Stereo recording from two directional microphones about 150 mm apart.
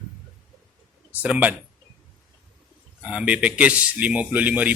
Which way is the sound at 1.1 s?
10° right (ahead or behind).